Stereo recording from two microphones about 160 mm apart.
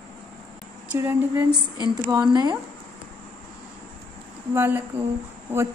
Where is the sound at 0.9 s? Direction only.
15° right (ahead or behind).